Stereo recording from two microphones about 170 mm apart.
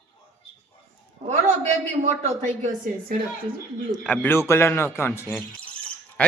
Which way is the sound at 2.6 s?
50° right (ahead or behind).